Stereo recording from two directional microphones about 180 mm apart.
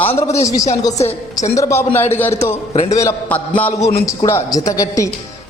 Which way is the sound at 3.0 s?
10° left (ahead or behind).